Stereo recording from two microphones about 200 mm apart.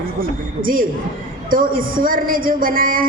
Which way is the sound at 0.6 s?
45° right (ahead or behind).